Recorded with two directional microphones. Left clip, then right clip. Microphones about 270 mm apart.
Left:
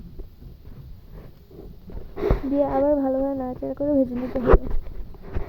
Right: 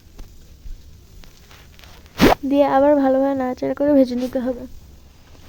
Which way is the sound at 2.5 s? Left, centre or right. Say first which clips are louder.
Right 6 dB; right.